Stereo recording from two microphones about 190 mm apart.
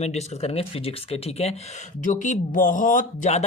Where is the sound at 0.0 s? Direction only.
35° left (ahead or behind).